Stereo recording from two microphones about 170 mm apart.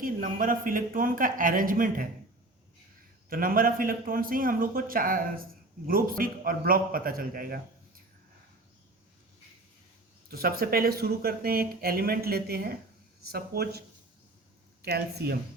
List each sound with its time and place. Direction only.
0.0 s speech: 55° right (ahead or behind)
3.2 s speech: 55° right (ahead or behind)
10.2 s speech: 65° right (ahead or behind)
14.8 s speech: 70° right (ahead or behind)